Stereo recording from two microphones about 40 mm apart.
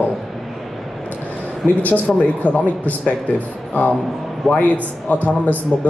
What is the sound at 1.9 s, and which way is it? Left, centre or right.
Speech, left.